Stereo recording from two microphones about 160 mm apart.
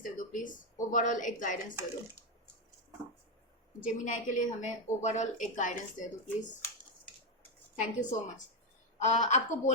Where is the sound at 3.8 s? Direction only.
55° left (ahead or behind).